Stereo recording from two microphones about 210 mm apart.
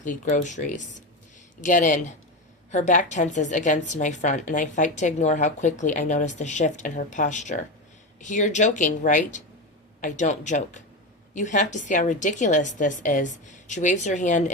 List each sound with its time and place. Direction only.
0.0 s a woman's voice: 40° left (ahead or behind)